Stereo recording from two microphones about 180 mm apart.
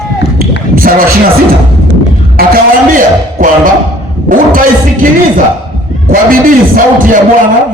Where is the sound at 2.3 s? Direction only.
50° right (ahead or behind).